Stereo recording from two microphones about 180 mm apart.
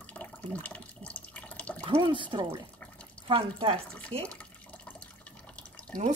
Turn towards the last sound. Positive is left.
turn(degrees=5)  # may be behind; listen again after turning